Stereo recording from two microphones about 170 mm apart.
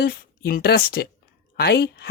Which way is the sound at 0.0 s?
60° left (ahead or behind).